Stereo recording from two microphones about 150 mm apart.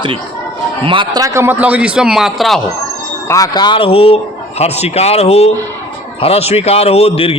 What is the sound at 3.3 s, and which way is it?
A man's voice, 25° left (ahead or behind).